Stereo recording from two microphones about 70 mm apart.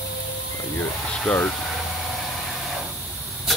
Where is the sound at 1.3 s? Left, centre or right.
Centre.